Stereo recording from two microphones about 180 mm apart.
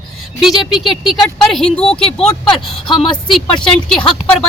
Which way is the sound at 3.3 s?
30° left (ahead or behind).